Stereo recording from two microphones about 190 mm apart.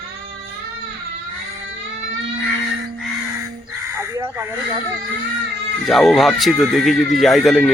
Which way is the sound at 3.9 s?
10° right (ahead or behind).